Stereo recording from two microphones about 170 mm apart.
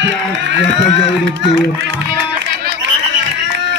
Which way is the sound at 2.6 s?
90° right.